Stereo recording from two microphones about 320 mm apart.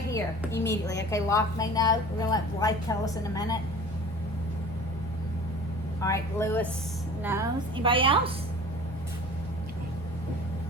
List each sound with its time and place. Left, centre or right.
0.5 s a woman's voice: left
1.1 s a woman's voice: centre
6.0 s a woman's voice: centre
7.2 s a woman's voice: centre